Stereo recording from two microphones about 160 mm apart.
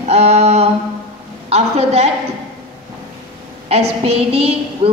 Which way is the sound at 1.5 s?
40° right (ahead or behind).